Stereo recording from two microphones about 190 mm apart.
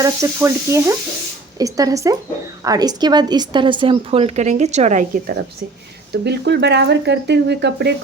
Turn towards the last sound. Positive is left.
turn(degrees=-65)  # may be behind; listen again after turning